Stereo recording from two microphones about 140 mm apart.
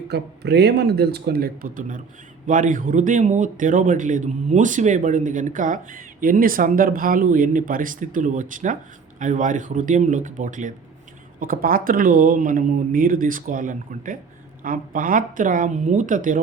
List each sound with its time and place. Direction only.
1.3 s speech: 90° right
2.5 s speech: 70° right (ahead or behind)
11.3 s speech: 90° right; by 16.4 s 70° right (ahead or behind)